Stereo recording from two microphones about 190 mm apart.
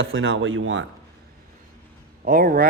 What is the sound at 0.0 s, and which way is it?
Speech, 80° right.